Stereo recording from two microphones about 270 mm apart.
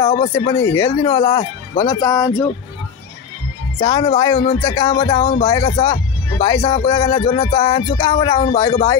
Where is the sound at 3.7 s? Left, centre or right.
Centre.